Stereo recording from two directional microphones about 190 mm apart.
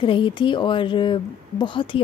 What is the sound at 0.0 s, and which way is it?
Speech, 25° left (ahead or behind).